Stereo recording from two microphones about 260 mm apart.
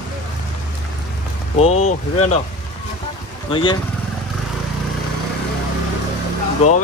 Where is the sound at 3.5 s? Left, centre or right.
Centre.